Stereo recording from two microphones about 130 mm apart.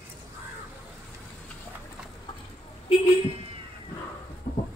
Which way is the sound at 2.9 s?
50° left (ahead or behind).